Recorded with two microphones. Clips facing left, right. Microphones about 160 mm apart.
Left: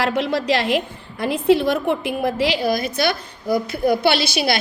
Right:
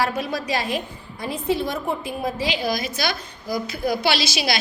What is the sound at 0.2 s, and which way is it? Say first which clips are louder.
A woman's voice: left 6 dB; 70° left (ahead or behind).